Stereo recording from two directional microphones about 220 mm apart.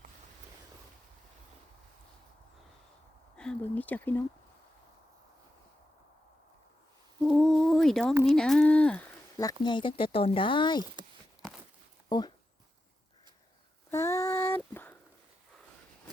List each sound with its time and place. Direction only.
3.3 s a sound: 5° left (ahead or behind)
7.2 s humming: 5° left (ahead or behind)
7.7 s a sound: centre (ahead or behind)
8.2 s speech: centre (ahead or behind)
9.4 s speech: 20° left (ahead or behind)
12.0 s speech: 20° left (ahead or behind)
13.9 s female singing: 10° left (ahead or behind)